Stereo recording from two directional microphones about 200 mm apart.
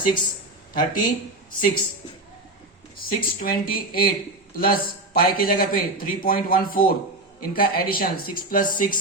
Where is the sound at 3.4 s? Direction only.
45° left (ahead or behind).